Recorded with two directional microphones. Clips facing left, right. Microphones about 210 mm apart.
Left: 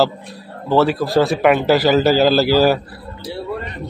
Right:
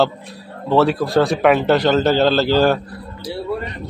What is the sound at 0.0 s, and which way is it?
Speech, centre (ahead or behind).